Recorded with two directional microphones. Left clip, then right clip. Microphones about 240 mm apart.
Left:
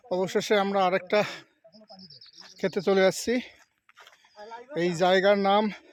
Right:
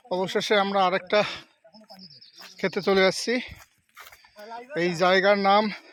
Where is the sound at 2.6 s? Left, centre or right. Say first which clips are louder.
Right 1 dB; centre.